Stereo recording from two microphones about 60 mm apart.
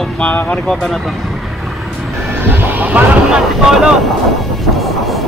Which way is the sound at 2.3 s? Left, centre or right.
Right.